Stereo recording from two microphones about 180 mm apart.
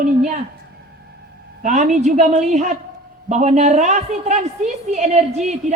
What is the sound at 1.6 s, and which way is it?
A woman's voice, 45° right (ahead or behind).